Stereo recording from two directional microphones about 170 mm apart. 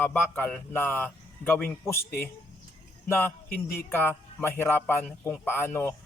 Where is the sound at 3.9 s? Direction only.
15° left (ahead or behind).